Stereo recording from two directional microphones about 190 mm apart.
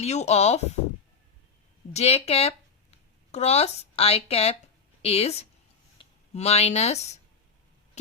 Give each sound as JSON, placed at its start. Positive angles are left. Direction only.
{"t": 0.0, "sound": "speech", "side_deg": 35}
{"t": 1.9, "sound": "speech", "side_deg": 35}